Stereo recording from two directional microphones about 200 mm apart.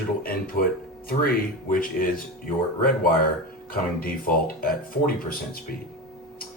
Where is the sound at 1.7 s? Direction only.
45° left (ahead or behind).